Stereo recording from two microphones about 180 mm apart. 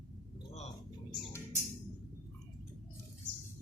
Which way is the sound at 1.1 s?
15° left (ahead or behind).